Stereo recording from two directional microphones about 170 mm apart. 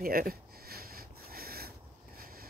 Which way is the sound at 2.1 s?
60° right (ahead or behind).